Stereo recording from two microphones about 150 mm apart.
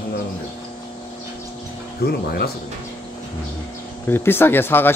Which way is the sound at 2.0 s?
90° left.